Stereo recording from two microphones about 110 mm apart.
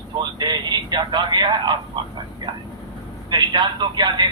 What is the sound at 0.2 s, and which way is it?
Speech, 40° right (ahead or behind).